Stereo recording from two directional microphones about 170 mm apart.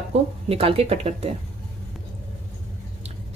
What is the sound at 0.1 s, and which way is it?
Speech, 40° right (ahead or behind).